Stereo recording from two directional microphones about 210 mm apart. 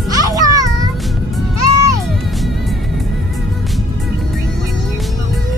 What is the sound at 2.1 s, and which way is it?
Music, centre (ahead or behind).